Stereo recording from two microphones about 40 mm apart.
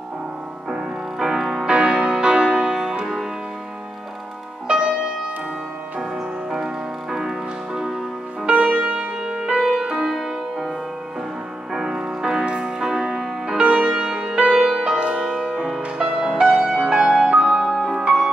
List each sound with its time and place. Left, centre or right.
0.7 s music: centre
4.6 s music: right
5.9 s music: centre
8.5 s music: right
9.2 s music: right
11.7 s music: centre
14.5 s music: centre
15.8 s music: right
16.2 s music: centre